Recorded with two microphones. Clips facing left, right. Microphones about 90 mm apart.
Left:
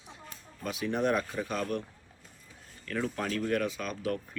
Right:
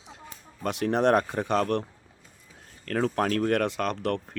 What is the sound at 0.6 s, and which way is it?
Speech, 70° right (ahead or behind).